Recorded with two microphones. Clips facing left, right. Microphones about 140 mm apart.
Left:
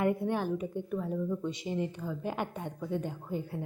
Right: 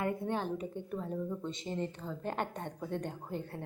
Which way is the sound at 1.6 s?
10° left (ahead or behind).